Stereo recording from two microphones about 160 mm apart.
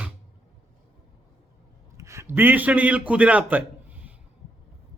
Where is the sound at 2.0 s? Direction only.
20° right (ahead or behind).